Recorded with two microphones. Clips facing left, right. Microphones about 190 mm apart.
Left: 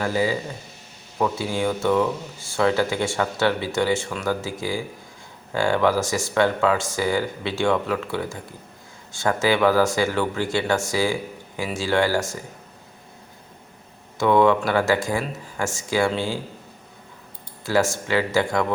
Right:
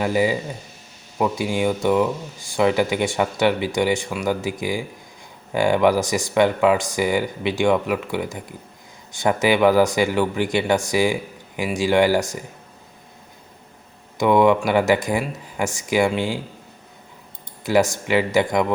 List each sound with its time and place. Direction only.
0.0 s speech: 15° right (ahead or behind)
14.2 s speech: 15° right (ahead or behind)
17.7 s speech: 15° right (ahead or behind)